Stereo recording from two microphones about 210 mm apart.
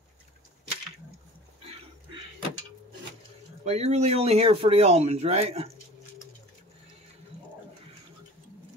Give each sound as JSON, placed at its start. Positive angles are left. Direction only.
{"t": 3.6, "sound": "speech", "side_deg": -30}